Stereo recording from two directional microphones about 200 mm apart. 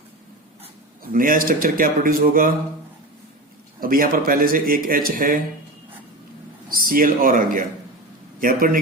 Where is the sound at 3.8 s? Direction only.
45° right (ahead or behind).